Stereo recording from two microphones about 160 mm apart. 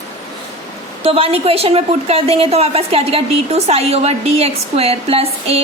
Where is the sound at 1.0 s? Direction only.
35° right (ahead or behind).